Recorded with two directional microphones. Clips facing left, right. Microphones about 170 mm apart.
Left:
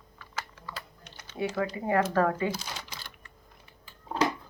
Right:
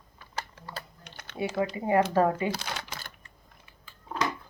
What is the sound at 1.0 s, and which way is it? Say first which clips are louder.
Typing: right 2 dB; 60° right (ahead or behind).